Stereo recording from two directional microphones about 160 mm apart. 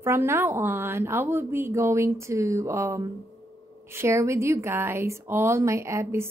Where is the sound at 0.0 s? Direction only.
15° right (ahead or behind).